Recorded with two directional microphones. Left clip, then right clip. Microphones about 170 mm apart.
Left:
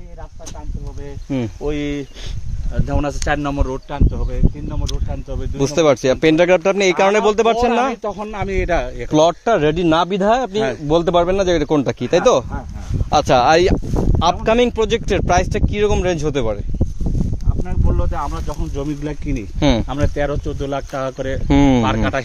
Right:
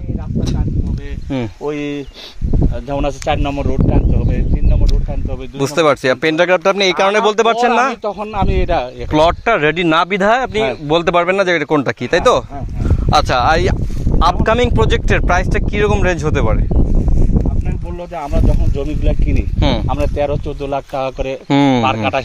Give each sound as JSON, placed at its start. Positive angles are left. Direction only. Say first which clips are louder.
{"t": 1.7, "sound": "speech", "louder": "right 1 dB", "side_deg": 5}
{"t": 5.6, "sound": "speech", "louder": "right 1 dB", "side_deg": 20}
{"t": 7.9, "sound": "speech", "louder": "right 4 dB", "side_deg": 0}
{"t": 9.1, "sound": "speech", "louder": "right 2 dB", "side_deg": 15}
{"t": 13.1, "sound": "speech", "louder": "even", "side_deg": 30}
{"t": 14.2, "sound": "speech", "louder": "right 2 dB", "side_deg": 20}
{"t": 19.6, "sound": "speech", "louder": "left 1 dB", "side_deg": 30}
{"t": 19.9, "sound": "speech", "louder": "right 3 dB", "side_deg": 10}